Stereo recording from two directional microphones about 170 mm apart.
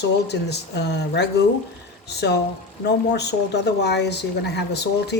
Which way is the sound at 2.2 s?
90° left.